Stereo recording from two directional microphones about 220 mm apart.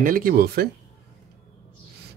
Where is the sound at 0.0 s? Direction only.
40° right (ahead or behind).